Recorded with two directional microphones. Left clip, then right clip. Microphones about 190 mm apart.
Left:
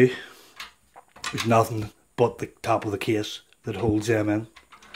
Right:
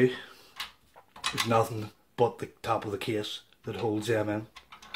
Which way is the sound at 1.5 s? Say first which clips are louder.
Left 8 dB; 40° left (ahead or behind).